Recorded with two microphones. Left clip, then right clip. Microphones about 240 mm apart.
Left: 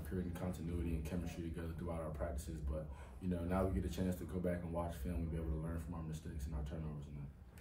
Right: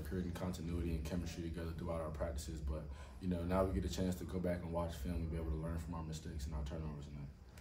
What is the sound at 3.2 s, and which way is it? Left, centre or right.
A man's voice, centre.